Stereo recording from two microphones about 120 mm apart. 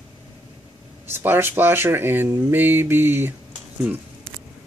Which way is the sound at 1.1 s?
20° right (ahead or behind).